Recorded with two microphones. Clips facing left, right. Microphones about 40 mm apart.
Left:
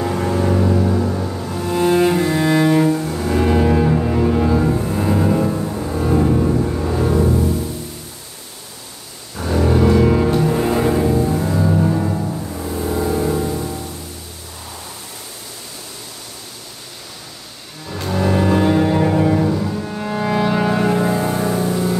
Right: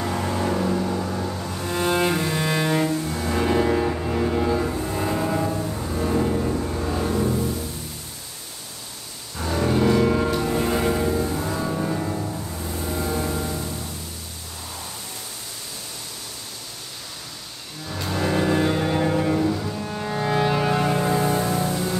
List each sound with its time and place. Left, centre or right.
0.0 s music: centre
1.4 s cello: centre
5.5 s music: centre
9.4 s music: centre
12.5 s vehicle: centre
17.8 s music: centre
19.5 s cello: centre
20.2 s music: centre